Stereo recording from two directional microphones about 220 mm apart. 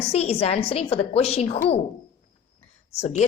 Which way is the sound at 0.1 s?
30° left (ahead or behind).